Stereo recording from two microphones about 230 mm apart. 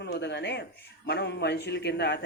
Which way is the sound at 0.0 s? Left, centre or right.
Left.